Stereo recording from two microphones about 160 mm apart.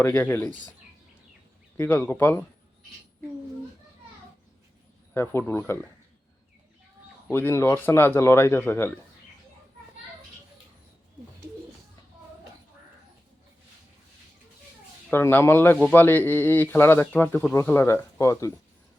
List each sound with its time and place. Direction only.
0.0 s speech: 15° left (ahead or behind)
1.7 s speech: 15° left (ahead or behind)
5.1 s speech: 15° left (ahead or behind)
7.3 s speech: 15° left (ahead or behind)
15.1 s speech: 15° left (ahead or behind)